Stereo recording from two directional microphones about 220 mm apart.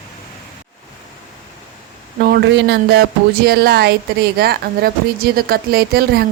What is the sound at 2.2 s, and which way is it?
Speech, 45° right (ahead or behind).